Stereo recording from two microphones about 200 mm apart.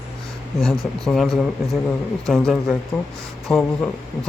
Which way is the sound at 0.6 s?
Centre (ahead or behind).